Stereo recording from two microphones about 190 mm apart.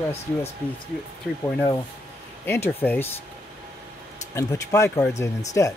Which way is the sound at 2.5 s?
10° left (ahead or behind).